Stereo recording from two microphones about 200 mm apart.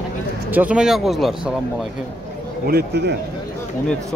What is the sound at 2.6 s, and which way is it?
Speech, 55° right (ahead or behind).